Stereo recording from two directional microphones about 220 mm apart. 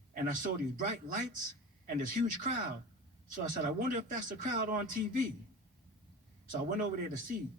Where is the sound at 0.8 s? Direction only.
35° right (ahead or behind).